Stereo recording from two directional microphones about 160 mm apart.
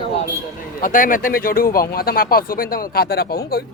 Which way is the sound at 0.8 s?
55° left (ahead or behind).